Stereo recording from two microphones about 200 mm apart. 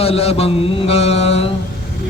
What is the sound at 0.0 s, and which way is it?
Mantra, 30° left (ahead or behind).